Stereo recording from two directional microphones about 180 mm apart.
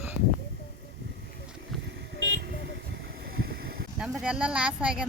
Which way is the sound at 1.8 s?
70° right (ahead or behind).